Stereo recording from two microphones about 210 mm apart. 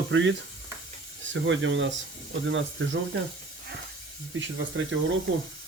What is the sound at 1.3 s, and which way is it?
Speech, 65° right (ahead or behind).